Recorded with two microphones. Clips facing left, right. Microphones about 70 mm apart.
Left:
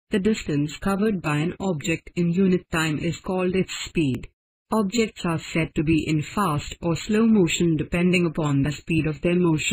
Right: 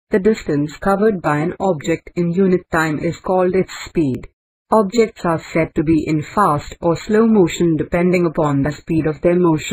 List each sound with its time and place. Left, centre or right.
0.1 s speech: right